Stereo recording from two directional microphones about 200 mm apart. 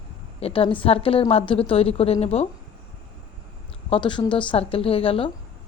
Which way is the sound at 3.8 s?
25° left (ahead or behind).